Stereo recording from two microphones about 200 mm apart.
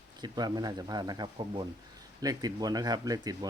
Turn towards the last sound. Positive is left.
turn(degrees=-20)  # may be behind; listen again after turning